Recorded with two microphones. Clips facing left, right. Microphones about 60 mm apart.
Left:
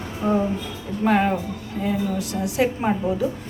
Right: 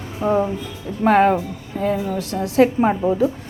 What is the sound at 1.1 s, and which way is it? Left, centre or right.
A woman's voice, right.